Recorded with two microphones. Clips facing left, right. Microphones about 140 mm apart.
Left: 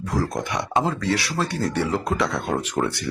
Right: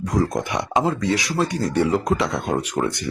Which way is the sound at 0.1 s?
20° right (ahead or behind).